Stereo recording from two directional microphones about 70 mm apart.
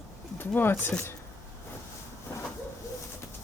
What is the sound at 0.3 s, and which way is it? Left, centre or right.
Speech, left.